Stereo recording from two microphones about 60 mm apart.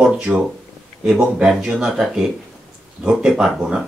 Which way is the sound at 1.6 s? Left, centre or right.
Centre.